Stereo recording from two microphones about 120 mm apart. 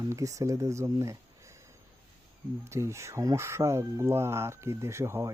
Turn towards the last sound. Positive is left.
turn(degrees=-25)  # may be behind; listen again after turning